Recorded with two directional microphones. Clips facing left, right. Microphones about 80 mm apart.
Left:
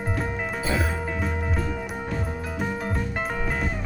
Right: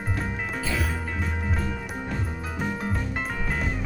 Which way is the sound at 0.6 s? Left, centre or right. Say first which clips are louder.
Left 4 dB; left.